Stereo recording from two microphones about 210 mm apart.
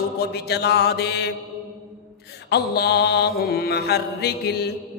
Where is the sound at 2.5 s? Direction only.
50° left (ahead or behind).